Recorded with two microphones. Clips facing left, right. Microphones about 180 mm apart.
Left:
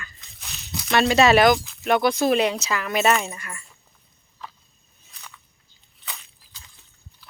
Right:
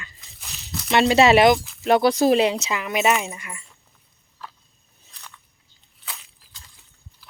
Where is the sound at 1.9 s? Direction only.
35° right (ahead or behind); by 3.6 s 20° right (ahead or behind).